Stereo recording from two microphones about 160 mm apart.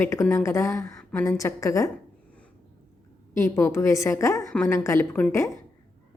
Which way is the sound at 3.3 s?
20° left (ahead or behind).